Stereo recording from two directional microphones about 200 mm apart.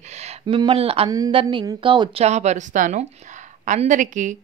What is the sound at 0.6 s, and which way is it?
Speech, 25° right (ahead or behind).